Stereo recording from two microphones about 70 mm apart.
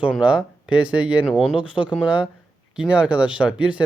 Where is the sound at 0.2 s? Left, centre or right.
Centre.